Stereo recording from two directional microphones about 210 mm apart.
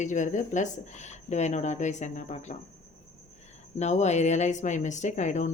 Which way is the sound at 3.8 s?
30° left (ahead or behind).